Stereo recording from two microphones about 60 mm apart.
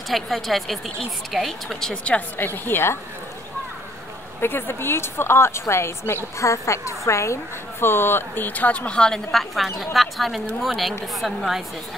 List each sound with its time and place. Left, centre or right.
0.1 s a woman's voice: centre
2.3 s a woman's voice: left
4.4 s a woman's voice: left
6.4 s a woman's voice: left
7.8 s speech: left; by 9.2 s centre
9.3 s a woman's voice: centre